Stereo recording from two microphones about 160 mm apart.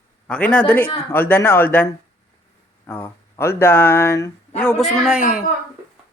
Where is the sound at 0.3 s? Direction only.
10° left (ahead or behind).